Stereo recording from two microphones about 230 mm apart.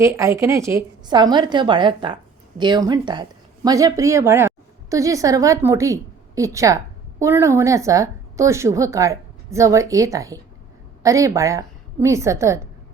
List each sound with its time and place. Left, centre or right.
0.0 s a woman's voice: centre